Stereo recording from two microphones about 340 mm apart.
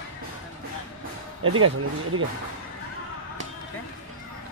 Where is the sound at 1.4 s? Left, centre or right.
Right.